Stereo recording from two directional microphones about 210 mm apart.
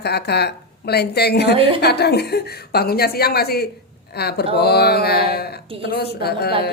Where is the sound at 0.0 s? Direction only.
50° left (ahead or behind).